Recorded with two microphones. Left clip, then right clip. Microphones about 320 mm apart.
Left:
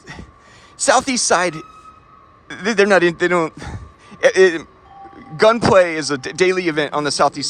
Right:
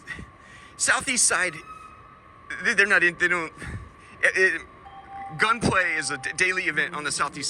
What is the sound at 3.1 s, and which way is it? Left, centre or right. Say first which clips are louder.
Speech: left 7 dB; centre.